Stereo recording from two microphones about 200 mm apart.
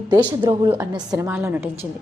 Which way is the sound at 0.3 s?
25° right (ahead or behind).